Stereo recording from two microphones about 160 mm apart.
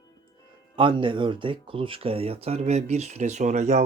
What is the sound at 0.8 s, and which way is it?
Speech, 30° right (ahead or behind).